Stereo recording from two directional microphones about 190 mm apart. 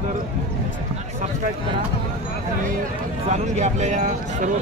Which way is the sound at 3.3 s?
35° right (ahead or behind).